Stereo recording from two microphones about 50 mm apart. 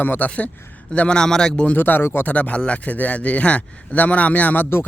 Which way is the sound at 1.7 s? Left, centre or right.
Left.